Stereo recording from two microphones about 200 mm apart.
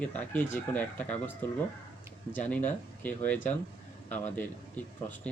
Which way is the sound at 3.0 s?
10° left (ahead or behind).